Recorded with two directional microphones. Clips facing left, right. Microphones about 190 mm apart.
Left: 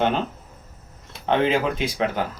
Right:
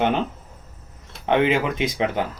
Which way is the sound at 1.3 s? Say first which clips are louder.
Right 1 dB; 20° right (ahead or behind).